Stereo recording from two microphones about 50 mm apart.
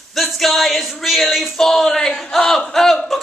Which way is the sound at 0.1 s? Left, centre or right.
Centre.